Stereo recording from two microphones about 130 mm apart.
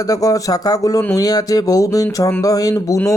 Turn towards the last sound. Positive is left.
turn(degrees=25)  # may be behind; listen again after turning